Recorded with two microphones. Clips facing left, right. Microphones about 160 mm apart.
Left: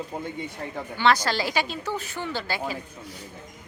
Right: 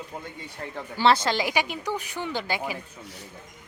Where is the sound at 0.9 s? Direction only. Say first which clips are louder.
Right 1 dB; 30° right (ahead or behind).